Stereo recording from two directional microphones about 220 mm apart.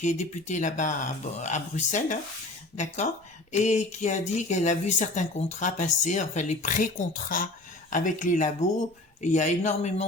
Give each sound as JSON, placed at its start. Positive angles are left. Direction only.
{"t": 0.0, "sound": "speech", "side_deg": 30}